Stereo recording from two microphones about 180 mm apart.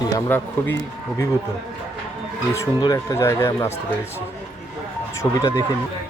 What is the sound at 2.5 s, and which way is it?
Speech, 20° left (ahead or behind).